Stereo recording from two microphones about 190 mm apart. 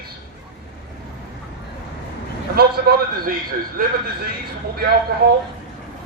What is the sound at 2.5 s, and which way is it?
Speech, 55° right (ahead or behind).